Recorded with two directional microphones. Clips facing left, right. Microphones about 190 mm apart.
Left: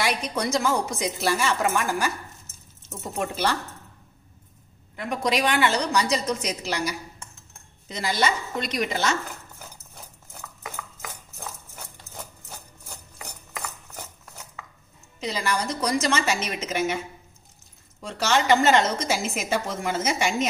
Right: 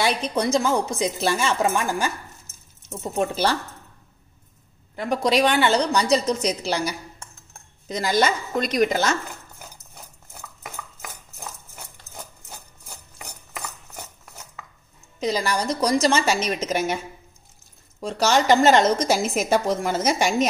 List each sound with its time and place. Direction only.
0.0 s a woman's voice: 30° right (ahead or behind)
4.9 s a woman's voice: 35° right (ahead or behind)
7.9 s a woman's voice: 45° right (ahead or behind)
15.1 s a woman's voice: 40° right (ahead or behind)
18.0 s a woman's voice: 40° right (ahead or behind)